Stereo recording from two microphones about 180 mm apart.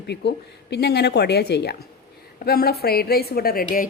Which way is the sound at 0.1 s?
70° left (ahead or behind).